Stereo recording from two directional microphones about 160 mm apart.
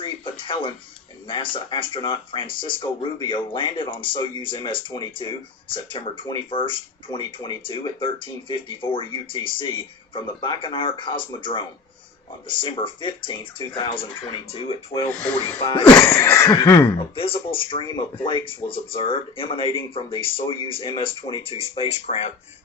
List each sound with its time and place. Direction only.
0.0 s a sound: 30° left (ahead or behind)
1.3 s speech: 30° left (ahead or behind)
16.0 s cough: 15° left (ahead or behind)
17.2 s speech: 35° left (ahead or behind)